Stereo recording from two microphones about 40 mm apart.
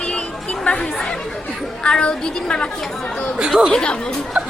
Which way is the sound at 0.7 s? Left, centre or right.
Left.